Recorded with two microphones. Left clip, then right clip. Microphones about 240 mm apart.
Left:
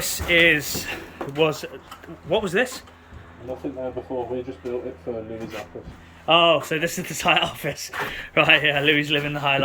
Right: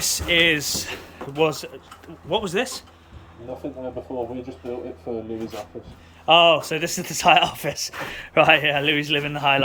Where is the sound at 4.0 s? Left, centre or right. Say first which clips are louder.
Left 1 dB; right.